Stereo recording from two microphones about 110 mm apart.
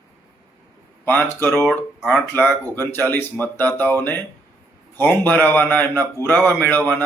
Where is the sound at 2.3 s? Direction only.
20° left (ahead or behind).